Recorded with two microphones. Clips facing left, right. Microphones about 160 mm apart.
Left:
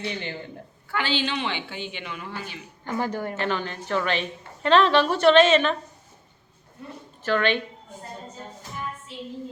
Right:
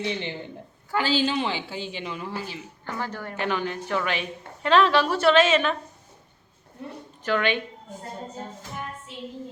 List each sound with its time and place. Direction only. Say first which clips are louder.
0.0 s a woman's voice: right 2 dB; 20° right (ahead or behind)
0.9 s a woman's voice: right 3 dB; 40° right (ahead or behind)
2.8 s speech: left 6 dB; 15° left (ahead or behind)
3.3 s a woman's voice: even; 10° right (ahead or behind)
7.3 s a woman's voice: left 1 dB; 10° right (ahead or behind)